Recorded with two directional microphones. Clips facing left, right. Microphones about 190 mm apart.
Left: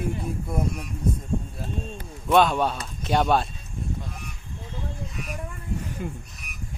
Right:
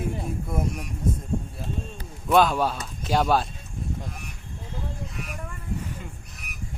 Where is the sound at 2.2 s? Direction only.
Centre (ahead or behind).